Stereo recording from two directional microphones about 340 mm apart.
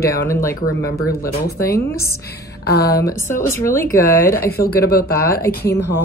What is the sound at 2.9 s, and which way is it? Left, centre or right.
Speech, centre.